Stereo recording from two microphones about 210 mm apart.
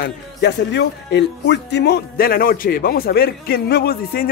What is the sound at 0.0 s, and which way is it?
Speech, 55° left (ahead or behind).